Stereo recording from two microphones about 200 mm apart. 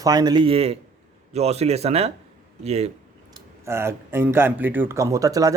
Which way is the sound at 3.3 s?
15° right (ahead or behind).